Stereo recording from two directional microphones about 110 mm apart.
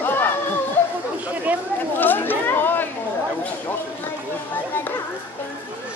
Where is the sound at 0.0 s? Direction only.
20° left (ahead or behind).